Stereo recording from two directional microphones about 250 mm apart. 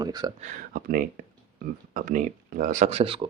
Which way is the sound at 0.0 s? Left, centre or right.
Centre.